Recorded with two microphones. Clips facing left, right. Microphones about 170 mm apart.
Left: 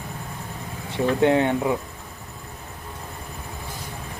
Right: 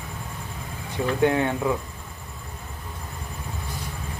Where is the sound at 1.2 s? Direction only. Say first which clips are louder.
Left 2 dB; 20° left (ahead or behind).